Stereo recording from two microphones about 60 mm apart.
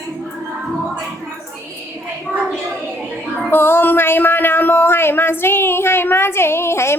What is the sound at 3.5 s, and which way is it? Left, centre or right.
Speech, left.